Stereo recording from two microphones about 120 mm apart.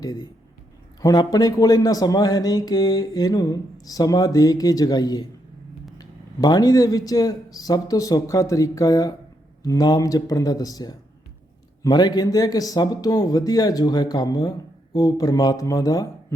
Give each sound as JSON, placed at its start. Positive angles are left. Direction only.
{"t": 0.0, "sound": "speech", "side_deg": 35}